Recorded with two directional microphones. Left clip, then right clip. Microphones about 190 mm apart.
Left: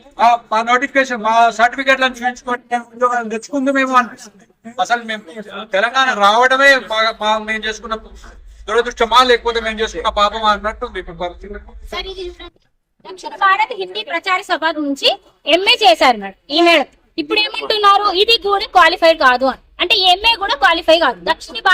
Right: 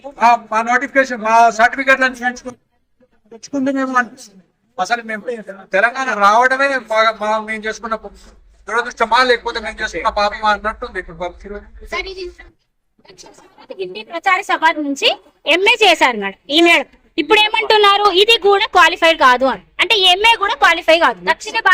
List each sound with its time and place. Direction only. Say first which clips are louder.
0.2 s a man's voice: even; 5° right (ahead or behind)
3.5 s a man's voice: left 3 dB; centre (ahead or behind)
14.3 s a woman's voice: right 4 dB; 15° right (ahead or behind)